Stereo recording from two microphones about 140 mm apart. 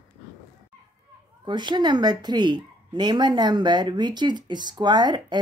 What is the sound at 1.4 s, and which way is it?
Speech, 35° right (ahead or behind).